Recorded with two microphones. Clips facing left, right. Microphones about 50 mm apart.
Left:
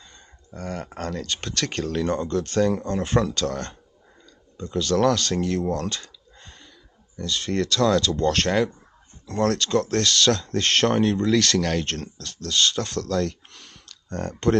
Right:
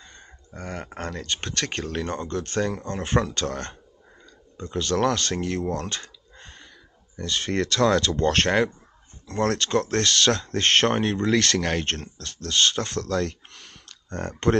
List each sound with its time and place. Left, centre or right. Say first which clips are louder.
0.0 s speech: right 2 dB; right